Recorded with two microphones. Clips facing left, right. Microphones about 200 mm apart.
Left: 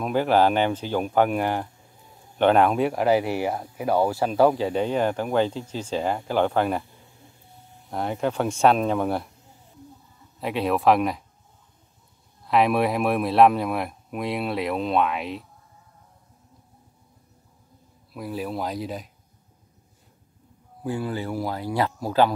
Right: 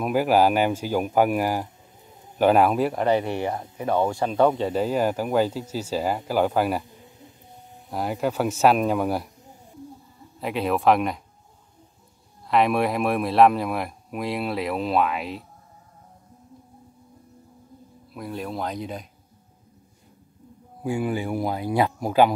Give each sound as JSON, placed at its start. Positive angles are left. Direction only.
{"t": 0.0, "sound": "speech", "side_deg": -5}
{"t": 6.8, "sound": "a sound", "side_deg": -20}
{"t": 7.9, "sound": "speech", "side_deg": -5}
{"t": 10.4, "sound": "speech", "side_deg": 0}
{"t": 12.4, "sound": "speech", "side_deg": 0}
{"t": 18.1, "sound": "speech", "side_deg": 5}
{"t": 20.8, "sound": "speech", "side_deg": -15}